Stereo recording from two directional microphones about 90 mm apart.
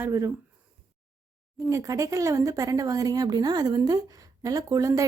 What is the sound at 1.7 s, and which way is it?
A woman's voice, 40° right (ahead or behind).